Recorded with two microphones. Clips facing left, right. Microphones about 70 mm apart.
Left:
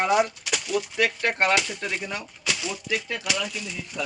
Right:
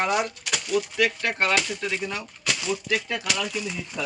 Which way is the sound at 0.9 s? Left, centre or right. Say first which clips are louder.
Left 3 dB; left.